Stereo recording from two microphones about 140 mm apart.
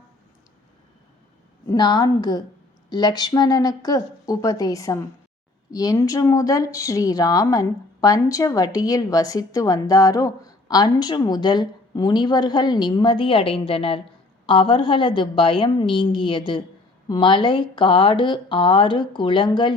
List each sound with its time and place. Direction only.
1.7 s speech: 30° left (ahead or behind)